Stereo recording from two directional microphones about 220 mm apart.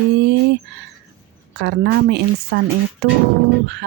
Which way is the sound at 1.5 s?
50° right (ahead or behind).